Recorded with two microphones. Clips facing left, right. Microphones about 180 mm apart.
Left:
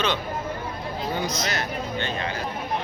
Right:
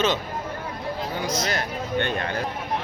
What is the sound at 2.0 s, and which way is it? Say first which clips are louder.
Speech: right 5 dB; 60° right (ahead or behind).